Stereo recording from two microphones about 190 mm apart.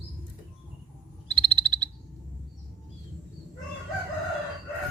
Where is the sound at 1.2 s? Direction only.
25° right (ahead or behind).